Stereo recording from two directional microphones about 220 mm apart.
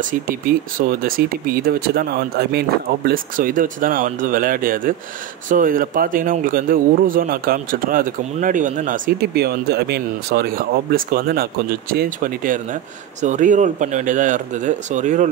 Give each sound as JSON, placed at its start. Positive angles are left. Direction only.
{"t": 0.0, "sound": "speech", "side_deg": -40}